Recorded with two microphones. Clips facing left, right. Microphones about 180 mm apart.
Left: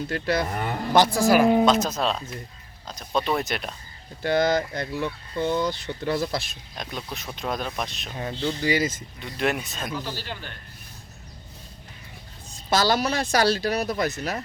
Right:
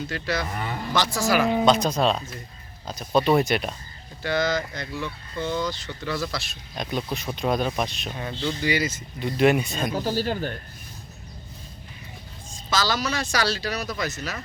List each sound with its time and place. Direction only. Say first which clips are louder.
0.1 s speech: left 6 dB; 50° left (ahead or behind)
1.6 s speech: right 1 dB; centre (ahead or behind)
4.2 s speech: left 3 dB; 55° left (ahead or behind)
6.7 s speech: right 6 dB; centre (ahead or behind)
8.1 s speech: left 1 dB; 35° left (ahead or behind); by 9.0 s 50° left (ahead or behind)
9.2 s speech: right 7 dB; centre (ahead or behind)
9.9 s speech: right 9 dB; 45° right (ahead or behind)
12.7 s speech: left 3 dB; 55° left (ahead or behind)